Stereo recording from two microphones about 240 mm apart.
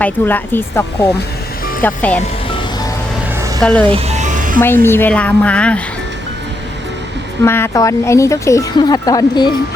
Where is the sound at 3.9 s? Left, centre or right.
Right.